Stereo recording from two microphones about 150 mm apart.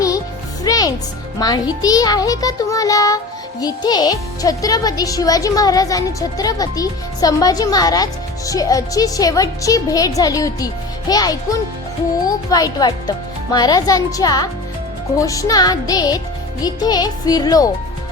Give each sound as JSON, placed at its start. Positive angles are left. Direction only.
{"t": 0.6, "sound": "music", "side_deg": 25}
{"t": 1.4, "sound": "a child's voice", "side_deg": 25}